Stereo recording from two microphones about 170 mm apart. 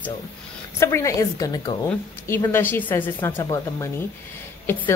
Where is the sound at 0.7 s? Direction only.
15° left (ahead or behind).